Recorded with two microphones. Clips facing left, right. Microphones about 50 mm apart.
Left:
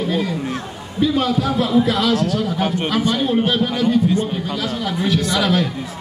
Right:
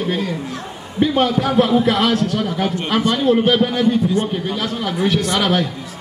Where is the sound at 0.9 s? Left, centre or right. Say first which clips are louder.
Right 2 dB; right.